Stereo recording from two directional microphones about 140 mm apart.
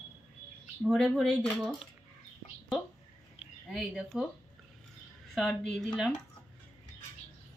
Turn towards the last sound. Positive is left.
turn(degrees=0)  # may be behind; listen again after turning